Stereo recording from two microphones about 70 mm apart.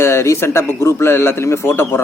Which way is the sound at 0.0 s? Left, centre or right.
Left.